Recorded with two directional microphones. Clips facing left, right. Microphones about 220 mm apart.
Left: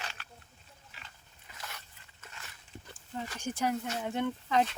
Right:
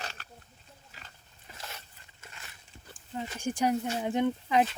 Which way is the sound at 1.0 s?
30° right (ahead or behind).